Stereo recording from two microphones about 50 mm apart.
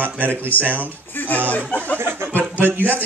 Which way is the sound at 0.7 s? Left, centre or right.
Left.